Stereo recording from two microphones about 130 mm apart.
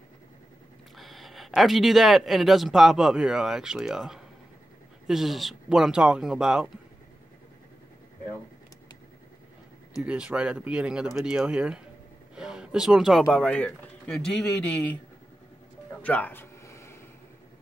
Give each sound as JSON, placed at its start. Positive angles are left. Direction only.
{"t": 0.9, "sound": "speech", "side_deg": 0}
{"t": 9.9, "sound": "speech", "side_deg": -10}
{"t": 16.0, "sound": "a sound", "side_deg": 10}